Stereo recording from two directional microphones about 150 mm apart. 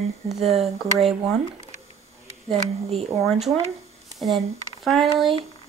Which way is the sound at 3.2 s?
Centre (ahead or behind).